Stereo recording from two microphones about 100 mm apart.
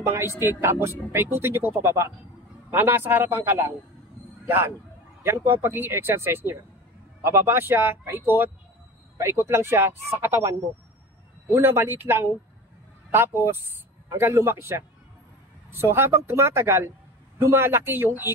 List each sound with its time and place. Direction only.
0.0 s speech: 25° right (ahead or behind)
9.5 s speech: 25° right (ahead or behind)
11.5 s speech: 25° right (ahead or behind)
14.1 s speech: 25° right (ahead or behind)